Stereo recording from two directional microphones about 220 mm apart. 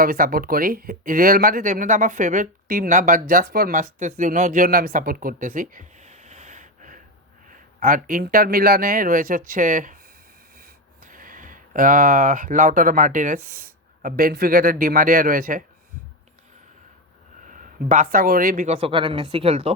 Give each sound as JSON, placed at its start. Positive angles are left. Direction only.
{"t": 0.0, "sound": "speech", "side_deg": -40}
{"t": 17.5, "sound": "speech", "side_deg": -35}